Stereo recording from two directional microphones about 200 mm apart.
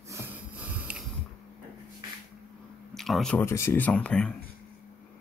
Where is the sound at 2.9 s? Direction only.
Centre (ahead or behind).